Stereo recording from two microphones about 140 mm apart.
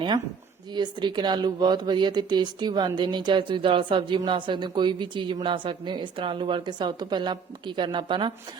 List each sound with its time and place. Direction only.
0.7 s speech: 30° right (ahead or behind)